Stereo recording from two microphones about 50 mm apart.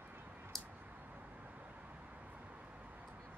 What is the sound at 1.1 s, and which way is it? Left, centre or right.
Vehicle, right.